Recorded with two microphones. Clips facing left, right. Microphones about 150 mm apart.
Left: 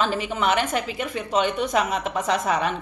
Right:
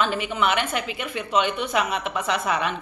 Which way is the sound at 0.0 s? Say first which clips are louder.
Even; 40° left (ahead or behind).